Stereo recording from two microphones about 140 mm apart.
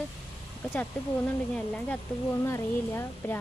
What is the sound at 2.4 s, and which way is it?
Speech, 20° left (ahead or behind).